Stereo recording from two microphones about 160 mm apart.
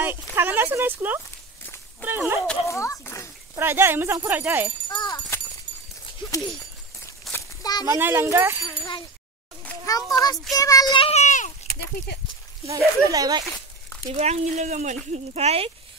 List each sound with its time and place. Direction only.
0.0 s speech: 15° right (ahead or behind)
2.7 s speech: 20° left (ahead or behind)
3.5 s speech: 15° right (ahead or behind)
4.8 s a sound: 25° left (ahead or behind)
6.3 s speech: 30° left (ahead or behind)
7.3 s a sound: 25° left (ahead or behind)
7.8 s speech: 15° right (ahead or behind)
8.6 s a child's voice: 30° left (ahead or behind); by 11.5 s 50° left (ahead or behind)
11.6 s speech: 80° left
12.6 s speech: 20° right (ahead or behind)
14.0 s speech: 40° right (ahead or behind)